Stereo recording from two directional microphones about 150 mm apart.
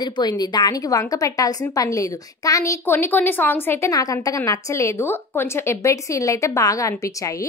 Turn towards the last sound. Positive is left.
turn(degrees=20)  # may be behind; listen again after turning